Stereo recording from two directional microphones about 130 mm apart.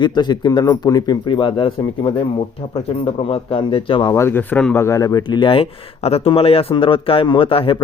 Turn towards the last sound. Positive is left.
turn(degrees=45)  # may be behind; listen again after turning